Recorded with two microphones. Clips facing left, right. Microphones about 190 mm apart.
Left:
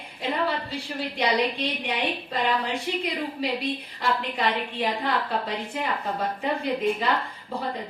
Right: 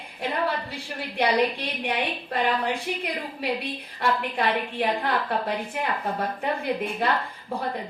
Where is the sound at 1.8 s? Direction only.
60° right (ahead or behind).